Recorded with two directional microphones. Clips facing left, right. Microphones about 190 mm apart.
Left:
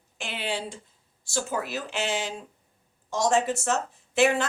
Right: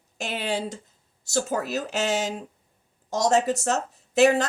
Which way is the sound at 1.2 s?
40° right (ahead or behind).